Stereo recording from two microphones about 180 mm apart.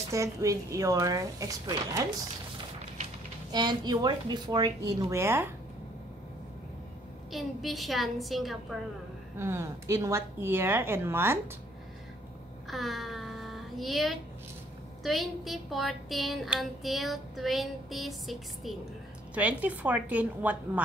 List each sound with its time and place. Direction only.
0.1 s a woman's voice: 15° right (ahead or behind)
3.5 s speech: 25° right (ahead or behind)
7.3 s speech: centre (ahead or behind)
9.4 s a woman's voice: 15° right (ahead or behind)
12.6 s child singing: centre (ahead or behind)
15.0 s a woman's voice: centre (ahead or behind)